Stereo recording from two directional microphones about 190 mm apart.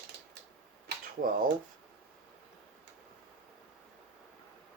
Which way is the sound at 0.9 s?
50° right (ahead or behind).